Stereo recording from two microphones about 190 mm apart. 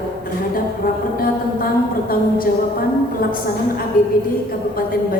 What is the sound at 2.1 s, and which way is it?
A woman's voice, 50° left (ahead or behind).